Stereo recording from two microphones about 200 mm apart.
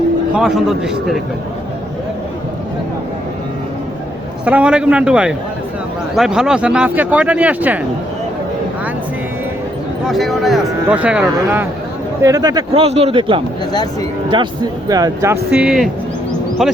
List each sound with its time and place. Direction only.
0.3 s speech: centre (ahead or behind)
4.4 s speech: 5° right (ahead or behind)
10.1 s a man's voice: centre (ahead or behind)